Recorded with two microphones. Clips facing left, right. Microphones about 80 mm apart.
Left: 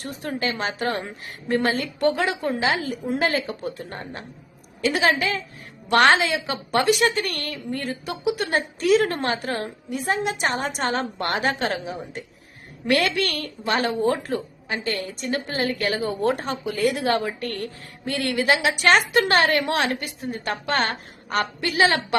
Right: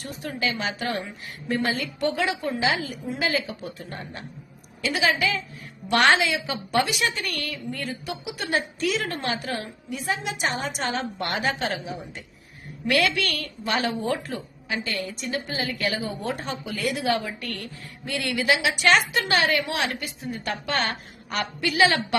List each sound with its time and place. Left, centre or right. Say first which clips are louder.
0.0 s a woman's voice: left 2 dB; left